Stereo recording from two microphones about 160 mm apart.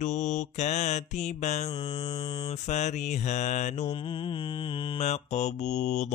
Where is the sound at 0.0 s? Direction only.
50° left (ahead or behind).